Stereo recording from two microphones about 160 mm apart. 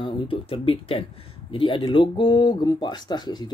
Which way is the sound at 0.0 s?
35° left (ahead or behind).